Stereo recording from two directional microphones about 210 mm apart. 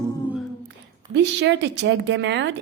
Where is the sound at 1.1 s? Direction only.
55° right (ahead or behind).